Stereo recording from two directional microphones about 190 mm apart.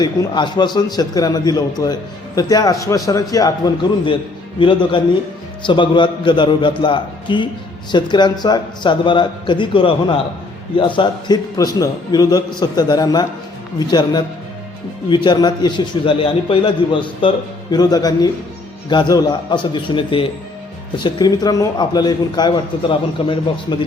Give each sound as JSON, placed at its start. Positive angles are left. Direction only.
{"t": 0.0, "sound": "a man's voice", "side_deg": 20}